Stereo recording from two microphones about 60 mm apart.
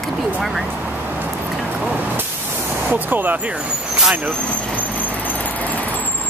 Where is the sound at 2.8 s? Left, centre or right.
Right.